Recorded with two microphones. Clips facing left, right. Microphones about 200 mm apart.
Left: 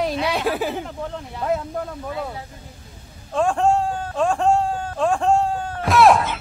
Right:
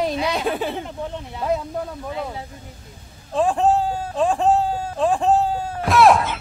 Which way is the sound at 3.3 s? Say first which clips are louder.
Right 1 dB; centre (ahead or behind).